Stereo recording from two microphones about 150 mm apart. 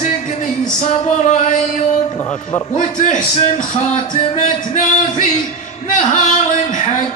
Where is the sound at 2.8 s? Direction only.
60° left (ahead or behind).